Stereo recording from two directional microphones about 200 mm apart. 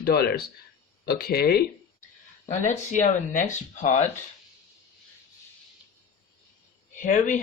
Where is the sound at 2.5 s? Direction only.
40° left (ahead or behind).